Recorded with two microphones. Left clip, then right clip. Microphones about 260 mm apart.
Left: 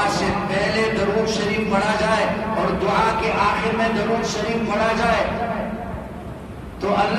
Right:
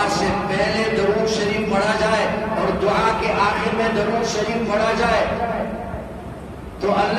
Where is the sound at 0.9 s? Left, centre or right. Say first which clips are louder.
Right 2 dB; left.